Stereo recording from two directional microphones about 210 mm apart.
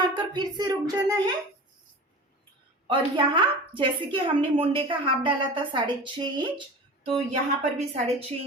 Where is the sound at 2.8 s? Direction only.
25° right (ahead or behind).